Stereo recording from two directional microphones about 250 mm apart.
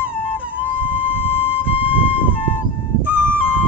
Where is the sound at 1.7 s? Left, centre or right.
Left.